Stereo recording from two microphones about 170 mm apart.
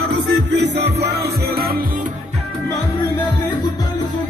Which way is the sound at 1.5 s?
65° right (ahead or behind).